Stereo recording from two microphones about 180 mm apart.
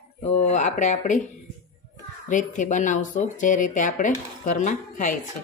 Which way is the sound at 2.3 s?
45° left (ahead or behind).